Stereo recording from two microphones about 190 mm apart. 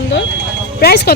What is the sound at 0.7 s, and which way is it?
Speech, 55° left (ahead or behind).